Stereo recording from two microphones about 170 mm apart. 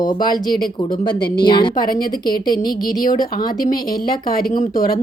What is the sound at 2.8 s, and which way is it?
Speech, 55° left (ahead or behind).